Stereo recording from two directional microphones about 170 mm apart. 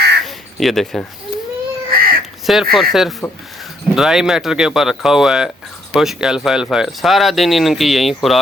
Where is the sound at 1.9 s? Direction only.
60° right (ahead or behind).